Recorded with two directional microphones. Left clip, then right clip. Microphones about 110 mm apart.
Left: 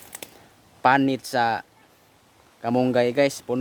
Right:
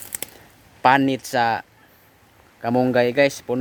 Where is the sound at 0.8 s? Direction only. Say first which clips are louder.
Right 3 dB; 15° left (ahead or behind).